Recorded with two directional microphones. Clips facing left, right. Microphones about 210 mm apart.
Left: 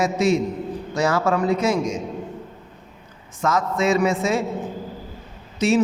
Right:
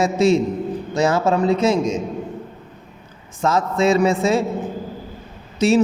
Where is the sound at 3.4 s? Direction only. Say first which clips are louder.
Right 3 dB; 30° right (ahead or behind).